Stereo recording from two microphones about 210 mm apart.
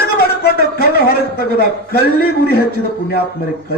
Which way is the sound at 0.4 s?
50° left (ahead or behind).